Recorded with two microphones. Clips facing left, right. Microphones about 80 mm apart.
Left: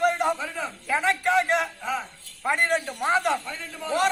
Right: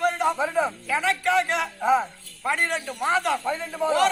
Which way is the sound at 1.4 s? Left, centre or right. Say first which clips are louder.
Left 1 dB; left.